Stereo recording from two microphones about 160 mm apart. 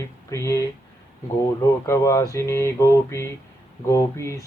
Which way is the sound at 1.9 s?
20° left (ahead or behind).